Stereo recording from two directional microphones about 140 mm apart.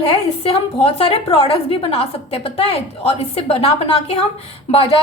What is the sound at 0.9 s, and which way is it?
A woman's voice, 45° left (ahead or behind).